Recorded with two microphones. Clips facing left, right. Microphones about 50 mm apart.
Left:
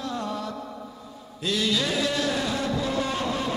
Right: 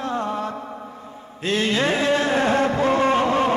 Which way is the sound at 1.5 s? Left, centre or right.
Right.